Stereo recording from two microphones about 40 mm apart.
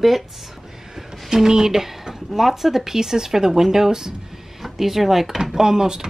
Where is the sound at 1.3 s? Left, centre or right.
Centre.